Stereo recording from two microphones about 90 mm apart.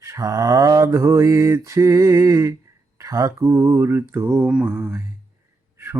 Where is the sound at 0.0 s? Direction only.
35° right (ahead or behind).